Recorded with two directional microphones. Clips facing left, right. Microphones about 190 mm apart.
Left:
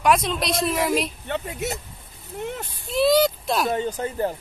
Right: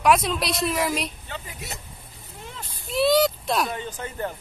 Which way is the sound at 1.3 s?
70° left (ahead or behind).